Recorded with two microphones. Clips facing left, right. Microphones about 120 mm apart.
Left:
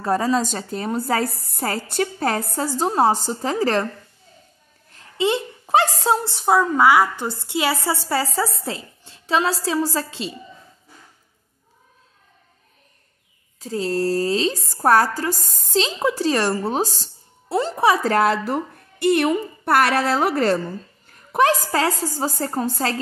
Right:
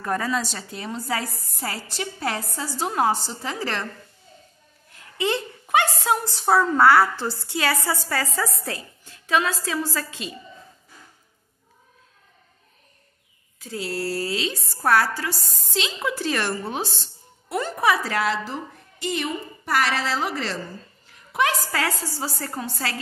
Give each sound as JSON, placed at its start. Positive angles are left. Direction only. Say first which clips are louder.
{"t": 0.0, "sound": "a woman's voice", "louder": "left 5 dB", "side_deg": 30}
{"t": 2.9, "sound": "a woman's voice", "louder": "left 3 dB", "side_deg": 35}
{"t": 5.1, "sound": "a sound", "louder": "left 4 dB", "side_deg": 20}
{"t": 5.8, "sound": "a woman's voice", "louder": "left 3 dB", "side_deg": 35}
{"t": 13.6, "sound": "a woman's voice", "louder": "left 7 dB", "side_deg": 35}
{"t": 18.0, "sound": "a woman's voice", "louder": "left 6 dB", "side_deg": 45}